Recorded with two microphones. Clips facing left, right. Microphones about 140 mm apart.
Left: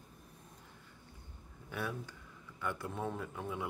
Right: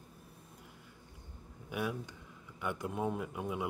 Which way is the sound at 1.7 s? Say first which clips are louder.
Right 3 dB; 15° right (ahead or behind).